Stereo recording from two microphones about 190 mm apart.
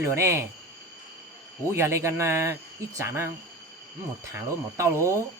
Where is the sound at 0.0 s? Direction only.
15° right (ahead or behind).